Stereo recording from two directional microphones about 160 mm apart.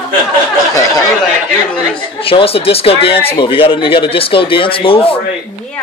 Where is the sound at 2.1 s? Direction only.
35° left (ahead or behind).